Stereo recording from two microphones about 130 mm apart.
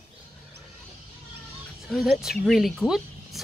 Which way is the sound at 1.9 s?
Centre (ahead or behind).